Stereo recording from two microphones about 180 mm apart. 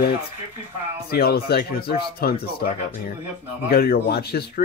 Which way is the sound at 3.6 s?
55° left (ahead or behind).